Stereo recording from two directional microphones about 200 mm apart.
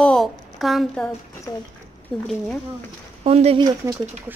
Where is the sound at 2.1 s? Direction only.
5° left (ahead or behind).